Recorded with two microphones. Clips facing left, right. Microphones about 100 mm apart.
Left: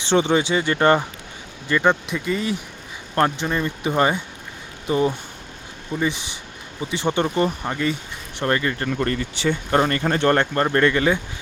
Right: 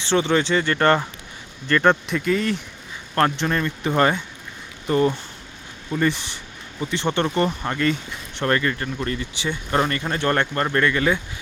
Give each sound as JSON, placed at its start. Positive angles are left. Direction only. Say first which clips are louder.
{"t": 0.0, "sound": "speech", "louder": "left 1 dB", "side_deg": 20}
{"t": 1.6, "sound": "speech", "louder": "right 1 dB", "side_deg": 5}
{"t": 8.9, "sound": "speech", "louder": "left 4 dB", "side_deg": 50}
{"t": 9.9, "sound": "speech", "louder": "left 4 dB", "side_deg": 40}